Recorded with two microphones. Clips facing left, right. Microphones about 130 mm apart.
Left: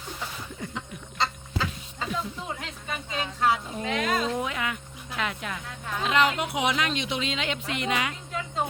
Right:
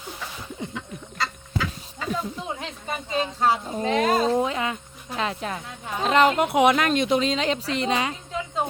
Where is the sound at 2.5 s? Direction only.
30° right (ahead or behind).